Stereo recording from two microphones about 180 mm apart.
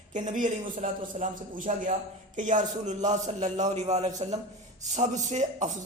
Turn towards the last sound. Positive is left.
turn(degrees=-40)  # may be behind; listen again after turning